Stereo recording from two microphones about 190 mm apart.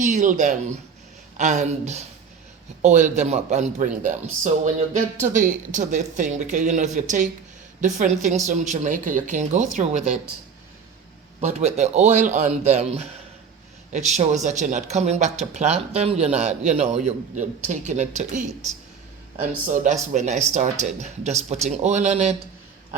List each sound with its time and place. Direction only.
0.0 s speech: 40° right (ahead or behind)
11.3 s speech: 35° right (ahead or behind)